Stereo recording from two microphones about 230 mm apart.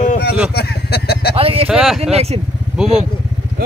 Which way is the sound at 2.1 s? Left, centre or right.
Right.